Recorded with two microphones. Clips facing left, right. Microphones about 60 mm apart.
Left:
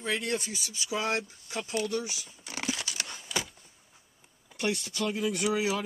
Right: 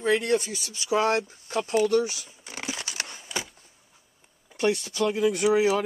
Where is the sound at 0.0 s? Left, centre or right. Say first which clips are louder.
Right 8 dB; right.